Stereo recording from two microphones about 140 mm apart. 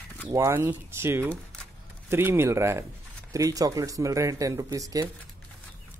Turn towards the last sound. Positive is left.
turn(degrees=-25)  # may be behind; listen again after turning